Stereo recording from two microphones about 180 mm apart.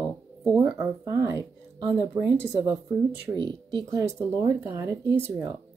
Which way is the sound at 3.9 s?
15° right (ahead or behind).